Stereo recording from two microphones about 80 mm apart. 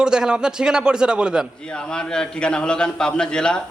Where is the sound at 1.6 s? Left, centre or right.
Centre.